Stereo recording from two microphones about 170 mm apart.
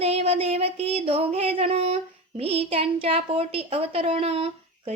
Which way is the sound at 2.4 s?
35° right (ahead or behind).